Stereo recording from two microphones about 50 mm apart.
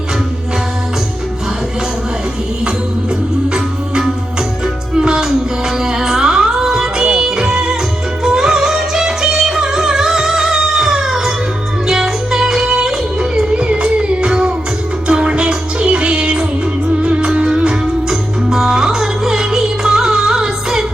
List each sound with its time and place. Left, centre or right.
3.5 s music: centre
13.5 s music: right